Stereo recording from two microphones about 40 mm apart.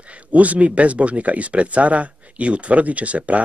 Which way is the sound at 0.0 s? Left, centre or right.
Right.